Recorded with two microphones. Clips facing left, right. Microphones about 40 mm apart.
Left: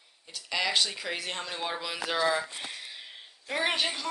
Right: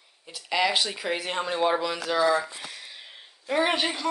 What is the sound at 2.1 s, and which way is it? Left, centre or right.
Speech, left.